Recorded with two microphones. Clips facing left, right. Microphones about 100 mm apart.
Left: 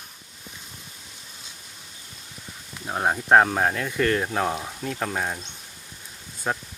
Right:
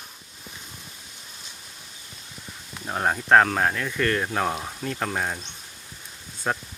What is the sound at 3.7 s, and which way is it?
Speech, 25° left (ahead or behind).